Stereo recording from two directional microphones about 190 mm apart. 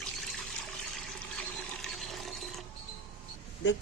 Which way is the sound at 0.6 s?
Centre (ahead or behind).